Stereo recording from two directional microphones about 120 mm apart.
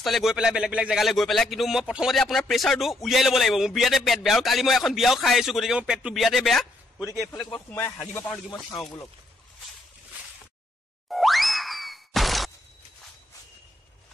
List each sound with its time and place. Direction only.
0.0 s speech: centre (ahead or behind)
7.3 s speech: 40° left (ahead or behind)
8.7 s speech: 30° left (ahead or behind)
11.1 s boing: centre (ahead or behind)